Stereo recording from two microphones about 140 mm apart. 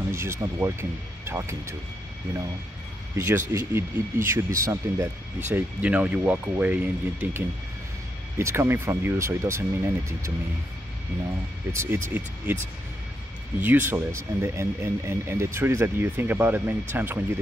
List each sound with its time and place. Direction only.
0.1 s speech: 20° right (ahead or behind)
3.2 s speech: 20° right (ahead or behind)
11.7 s speech: 20° right (ahead or behind)
13.6 s speech: 15° right (ahead or behind)